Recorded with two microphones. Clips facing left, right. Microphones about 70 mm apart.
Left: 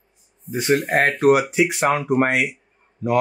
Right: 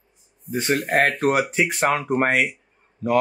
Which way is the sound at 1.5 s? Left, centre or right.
Right.